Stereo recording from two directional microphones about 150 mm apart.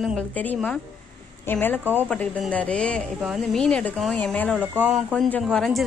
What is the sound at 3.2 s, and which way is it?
A woman's voice, centre (ahead or behind).